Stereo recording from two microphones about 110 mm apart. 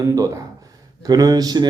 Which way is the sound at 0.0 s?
30° right (ahead or behind).